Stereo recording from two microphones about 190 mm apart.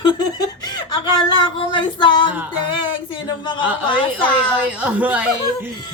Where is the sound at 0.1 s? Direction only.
20° left (ahead or behind).